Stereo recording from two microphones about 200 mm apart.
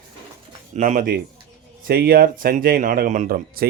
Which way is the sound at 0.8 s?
40° right (ahead or behind).